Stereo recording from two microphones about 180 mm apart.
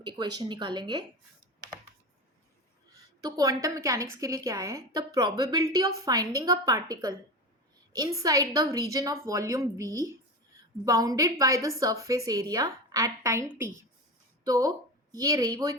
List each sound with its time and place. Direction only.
0.0 s a woman's voice: 25° right (ahead or behind)
3.2 s a woman's voice: 20° right (ahead or behind)